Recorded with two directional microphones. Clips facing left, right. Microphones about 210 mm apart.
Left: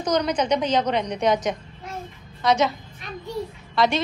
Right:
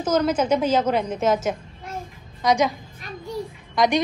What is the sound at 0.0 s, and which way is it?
A woman's voice, 5° right (ahead or behind).